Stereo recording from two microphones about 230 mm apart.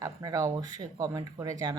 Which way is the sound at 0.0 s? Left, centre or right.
Centre.